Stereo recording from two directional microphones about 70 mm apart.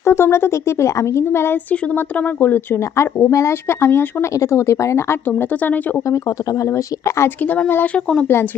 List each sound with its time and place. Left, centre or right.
0.0 s speech: left
2.0 s speech: left
2.9 s speech: left
6.1 s speech: left
7.4 s speech: left
7.9 s speech: centre